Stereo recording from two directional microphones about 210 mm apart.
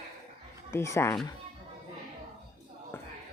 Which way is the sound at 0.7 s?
15° left (ahead or behind).